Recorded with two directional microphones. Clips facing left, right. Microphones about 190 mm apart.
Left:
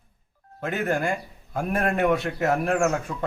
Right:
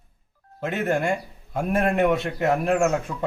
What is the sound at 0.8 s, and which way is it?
Speech, 25° right (ahead or behind).